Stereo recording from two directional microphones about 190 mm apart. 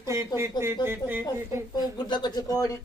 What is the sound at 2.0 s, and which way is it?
Speech, 20° left (ahead or behind).